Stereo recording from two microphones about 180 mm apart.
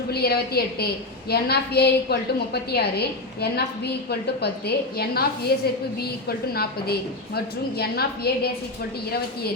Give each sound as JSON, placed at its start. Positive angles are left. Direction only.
{"t": 0.1, "sound": "a woman's voice", "side_deg": 60}